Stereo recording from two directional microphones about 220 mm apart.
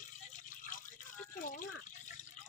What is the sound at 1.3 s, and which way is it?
Drip, 40° left (ahead or behind).